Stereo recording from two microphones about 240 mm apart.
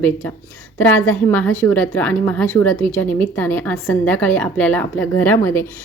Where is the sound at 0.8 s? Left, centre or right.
Centre.